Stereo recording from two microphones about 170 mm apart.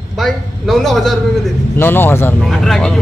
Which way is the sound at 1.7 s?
10° left (ahead or behind).